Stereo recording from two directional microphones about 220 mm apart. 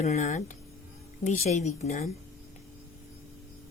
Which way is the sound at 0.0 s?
30° left (ahead or behind).